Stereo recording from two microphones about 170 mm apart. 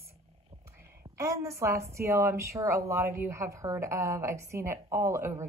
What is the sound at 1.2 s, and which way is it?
A woman's voice, 20° right (ahead or behind).